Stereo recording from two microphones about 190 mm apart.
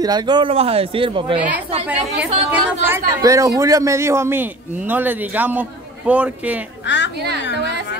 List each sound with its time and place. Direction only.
0.0 s speech: 20° right (ahead or behind)
2.5 s speech: 15° right (ahead or behind)
6.9 s a woman's voice: 70° left (ahead or behind)